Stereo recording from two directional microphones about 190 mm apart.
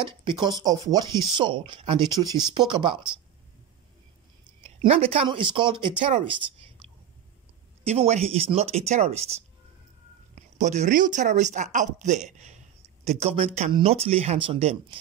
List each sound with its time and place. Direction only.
0.2 s speech: 25° right (ahead or behind)
4.6 s speech: 30° right (ahead or behind)
7.8 s speech: 35° right (ahead or behind)
10.3 s speech: 40° right (ahead or behind)